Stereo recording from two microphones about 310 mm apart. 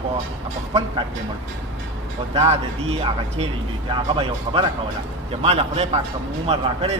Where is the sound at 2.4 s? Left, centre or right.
Centre.